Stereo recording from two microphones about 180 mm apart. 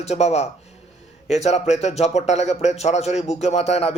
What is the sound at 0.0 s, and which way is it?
Speech, 35° left (ahead or behind).